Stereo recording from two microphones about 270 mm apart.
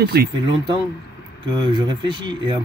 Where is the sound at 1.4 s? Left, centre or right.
Centre.